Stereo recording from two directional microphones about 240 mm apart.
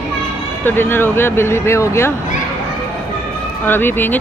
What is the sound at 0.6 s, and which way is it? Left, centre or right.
A woman's voice, centre.